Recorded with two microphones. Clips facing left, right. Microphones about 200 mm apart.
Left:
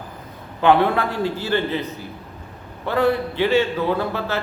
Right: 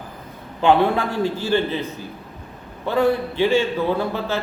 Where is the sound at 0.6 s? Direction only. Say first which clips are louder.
Even; 15° right (ahead or behind).